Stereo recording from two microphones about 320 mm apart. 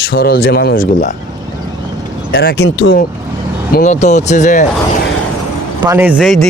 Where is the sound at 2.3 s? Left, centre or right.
Left.